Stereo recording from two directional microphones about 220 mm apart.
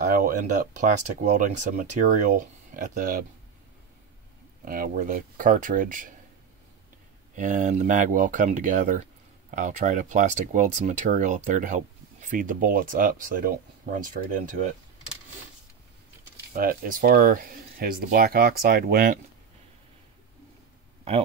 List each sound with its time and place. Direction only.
0.1 s speech: 35° right (ahead or behind)
4.6 s speech: 40° right (ahead or behind)
7.3 s speech: 35° right (ahead or behind)
16.5 s speech: 40° right (ahead or behind)